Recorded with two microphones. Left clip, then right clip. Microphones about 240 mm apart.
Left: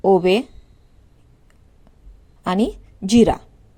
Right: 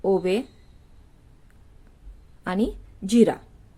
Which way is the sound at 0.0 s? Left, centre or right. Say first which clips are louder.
Left 7 dB; left.